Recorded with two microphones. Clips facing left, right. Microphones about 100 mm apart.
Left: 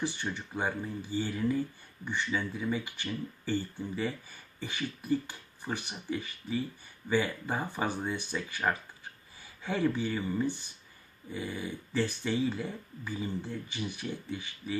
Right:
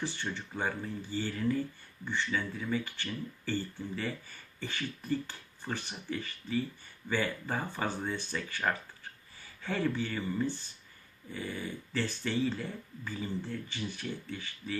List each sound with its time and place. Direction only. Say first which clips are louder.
0.0 s speech: left 2 dB; 15° left (ahead or behind)